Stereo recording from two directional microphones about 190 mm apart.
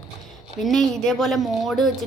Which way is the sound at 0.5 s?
Centre (ahead or behind).